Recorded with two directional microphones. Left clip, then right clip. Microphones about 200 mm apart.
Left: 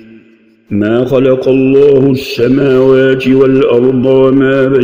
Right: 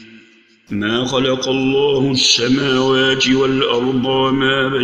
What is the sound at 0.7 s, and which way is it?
Mantra, 45° left (ahead or behind).